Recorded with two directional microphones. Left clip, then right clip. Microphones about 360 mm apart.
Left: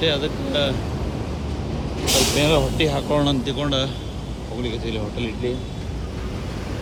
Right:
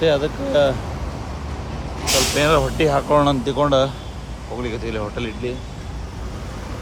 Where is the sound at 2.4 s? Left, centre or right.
Centre.